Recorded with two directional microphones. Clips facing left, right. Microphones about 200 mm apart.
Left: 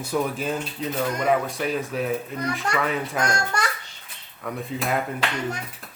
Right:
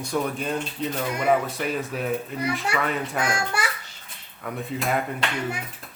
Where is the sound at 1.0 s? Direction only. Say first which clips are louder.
Even; 10° right (ahead or behind).